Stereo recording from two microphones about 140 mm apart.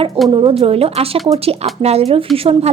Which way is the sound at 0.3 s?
35° right (ahead or behind).